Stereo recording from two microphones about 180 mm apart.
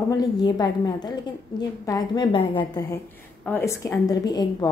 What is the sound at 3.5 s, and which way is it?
A woman's voice, 15° left (ahead or behind).